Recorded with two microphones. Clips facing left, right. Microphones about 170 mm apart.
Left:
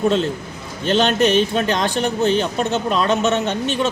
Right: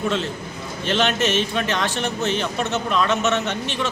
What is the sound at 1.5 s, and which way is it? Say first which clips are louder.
Speech: left 4 dB; 40° left (ahead or behind).